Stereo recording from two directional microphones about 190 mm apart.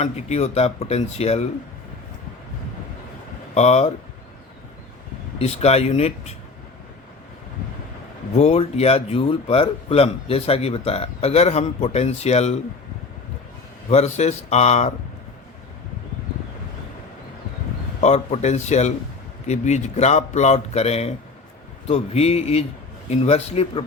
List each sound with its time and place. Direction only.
0.0 s speech: 35° left (ahead or behind)
3.5 s speech: 35° left (ahead or behind)
5.4 s speech: 35° left (ahead or behind)
8.4 s speech: 35° left (ahead or behind)
13.9 s speech: 35° left (ahead or behind)
18.0 s speech: 35° left (ahead or behind)